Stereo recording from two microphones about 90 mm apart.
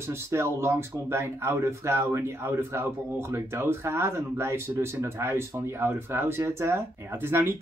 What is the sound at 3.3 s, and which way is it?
Speech, 30° right (ahead or behind).